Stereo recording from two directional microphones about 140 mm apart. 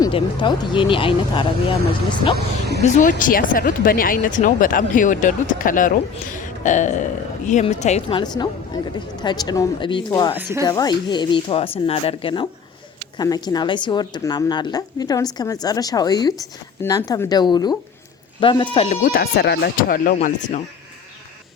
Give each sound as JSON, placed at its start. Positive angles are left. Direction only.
{"t": 0.1, "sound": "speech", "side_deg": 35}
{"t": 2.8, "sound": "speech", "side_deg": 60}
{"t": 8.1, "sound": "speech", "side_deg": 30}
{"t": 10.3, "sound": "speech", "side_deg": -15}
{"t": 10.6, "sound": "a woman's voice", "side_deg": 30}
{"t": 18.9, "sound": "speech", "side_deg": 80}
{"t": 20.2, "sound": "speech", "side_deg": 60}